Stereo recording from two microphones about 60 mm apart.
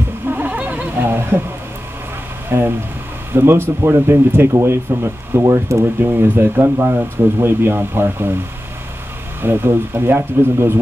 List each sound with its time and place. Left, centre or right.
0.3 s honk: right
1.0 s speech: right
2.5 s speech: right
5.4 s speech: right
6.0 s speech: right
9.4 s speech: right